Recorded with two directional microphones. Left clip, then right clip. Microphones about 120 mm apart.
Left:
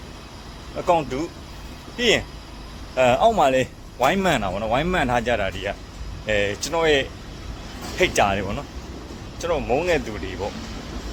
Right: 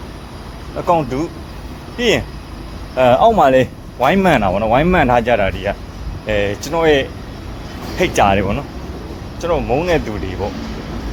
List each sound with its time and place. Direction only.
0.9 s speech: 25° left (ahead or behind)
8.1 s speech: 20° left (ahead or behind)